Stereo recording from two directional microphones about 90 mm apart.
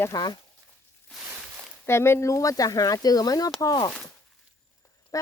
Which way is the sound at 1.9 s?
30° left (ahead or behind).